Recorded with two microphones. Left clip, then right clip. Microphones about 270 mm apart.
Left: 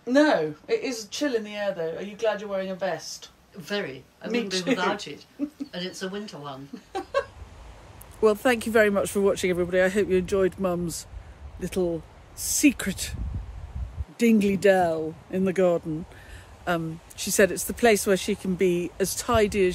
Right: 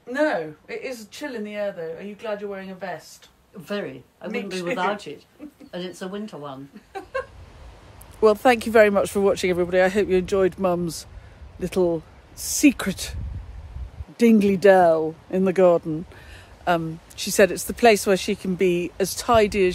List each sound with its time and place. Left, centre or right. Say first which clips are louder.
0.1 s a woman's voice: left 2 dB; centre
3.6 s speech: right 1 dB; centre
4.3 s a woman's voice: left 1 dB; centre
4.7 s speech: right 2 dB; centre
6.9 s a sound: left 3 dB; centre
8.2 s speech: right 5 dB; centre
16.6 s speech: right 5 dB; centre